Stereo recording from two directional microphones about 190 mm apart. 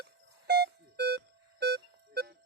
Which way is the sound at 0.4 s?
55° right (ahead or behind).